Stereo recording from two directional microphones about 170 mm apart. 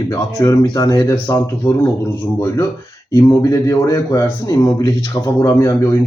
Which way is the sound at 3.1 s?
20° left (ahead or behind).